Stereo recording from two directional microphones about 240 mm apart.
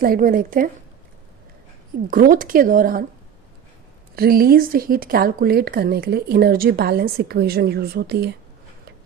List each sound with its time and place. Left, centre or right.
0.0 s speech: right
2.0 s speech: right
4.1 s speech: right